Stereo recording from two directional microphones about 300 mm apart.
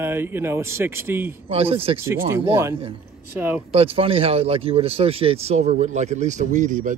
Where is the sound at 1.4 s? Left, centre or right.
Centre.